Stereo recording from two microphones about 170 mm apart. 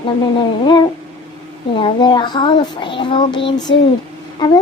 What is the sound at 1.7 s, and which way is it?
Speech, 30° left (ahead or behind).